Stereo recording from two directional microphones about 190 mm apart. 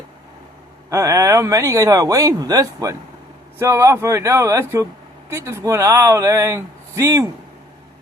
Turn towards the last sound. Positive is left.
turn(degrees=-15)  # may be behind; listen again after turning